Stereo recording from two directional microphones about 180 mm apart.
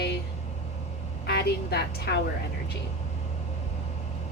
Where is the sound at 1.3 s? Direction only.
65° left (ahead or behind).